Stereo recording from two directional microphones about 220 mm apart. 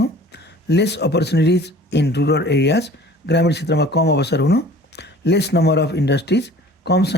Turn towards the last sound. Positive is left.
turn(degrees=50)  # may be behind; listen again after turning